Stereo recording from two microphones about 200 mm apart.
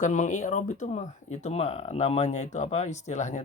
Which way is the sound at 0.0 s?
40° left (ahead or behind).